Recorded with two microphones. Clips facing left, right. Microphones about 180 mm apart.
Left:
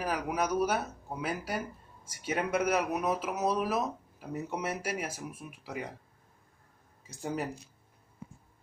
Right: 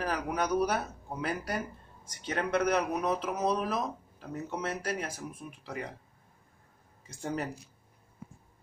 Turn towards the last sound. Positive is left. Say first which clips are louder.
# even
turn(degrees=5)  # may be behind; listen again after turning